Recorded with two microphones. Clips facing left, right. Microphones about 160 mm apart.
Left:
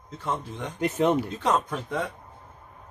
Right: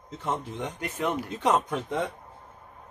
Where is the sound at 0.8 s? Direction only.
25° left (ahead or behind).